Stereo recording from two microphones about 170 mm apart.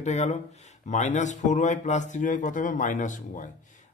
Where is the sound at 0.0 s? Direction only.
40° left (ahead or behind).